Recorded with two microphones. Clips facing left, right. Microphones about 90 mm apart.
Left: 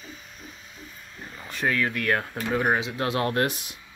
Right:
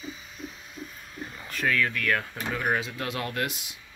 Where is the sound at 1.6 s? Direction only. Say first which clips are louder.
Left 1 dB; 25° left (ahead or behind).